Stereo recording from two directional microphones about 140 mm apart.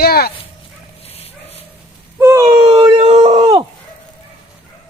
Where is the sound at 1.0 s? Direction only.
45° left (ahead or behind).